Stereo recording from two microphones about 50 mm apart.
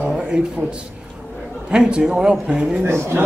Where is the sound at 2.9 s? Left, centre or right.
Right.